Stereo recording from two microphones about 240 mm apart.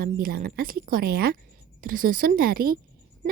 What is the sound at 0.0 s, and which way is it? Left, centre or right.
A woman's voice, right.